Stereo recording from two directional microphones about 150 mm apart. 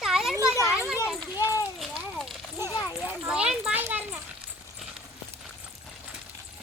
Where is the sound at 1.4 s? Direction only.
25° left (ahead or behind).